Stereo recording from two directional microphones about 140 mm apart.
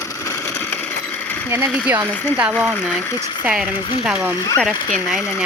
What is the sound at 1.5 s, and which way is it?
Speech, 15° right (ahead or behind).